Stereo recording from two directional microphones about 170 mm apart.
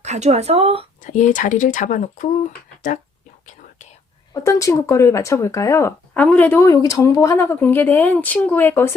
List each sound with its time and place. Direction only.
0.0 s speech: 40° right (ahead or behind)
1.0 s speech: 45° left (ahead or behind)
4.4 s speech: 20° left (ahead or behind)